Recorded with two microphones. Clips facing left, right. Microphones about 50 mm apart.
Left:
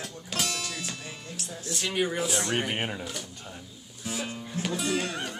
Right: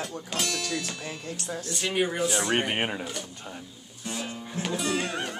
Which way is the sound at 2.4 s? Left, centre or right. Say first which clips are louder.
Right 3 dB; centre.